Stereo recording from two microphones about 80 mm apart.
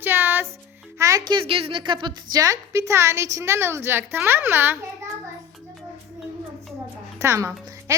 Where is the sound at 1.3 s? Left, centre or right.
Right.